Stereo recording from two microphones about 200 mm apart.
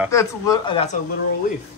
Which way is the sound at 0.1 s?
15° left (ahead or behind).